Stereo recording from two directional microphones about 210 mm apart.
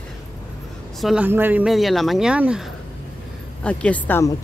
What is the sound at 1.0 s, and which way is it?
Speech, 5° right (ahead or behind).